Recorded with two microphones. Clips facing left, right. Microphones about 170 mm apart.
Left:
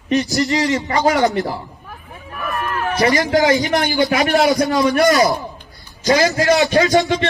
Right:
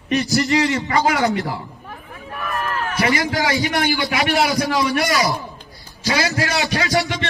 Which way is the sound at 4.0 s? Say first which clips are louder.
Left 4 dB; 40° left (ahead or behind).